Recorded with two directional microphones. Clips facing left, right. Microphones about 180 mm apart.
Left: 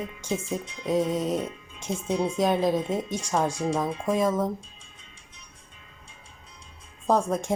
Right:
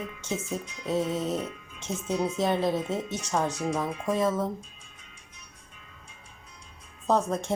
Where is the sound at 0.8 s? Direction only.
15° left (ahead or behind).